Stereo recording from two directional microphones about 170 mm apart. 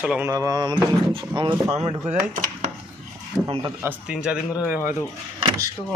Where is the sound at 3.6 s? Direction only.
10° right (ahead or behind).